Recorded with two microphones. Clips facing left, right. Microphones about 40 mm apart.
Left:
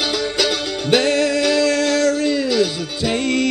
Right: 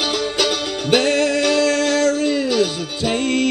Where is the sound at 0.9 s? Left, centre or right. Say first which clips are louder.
Even; right.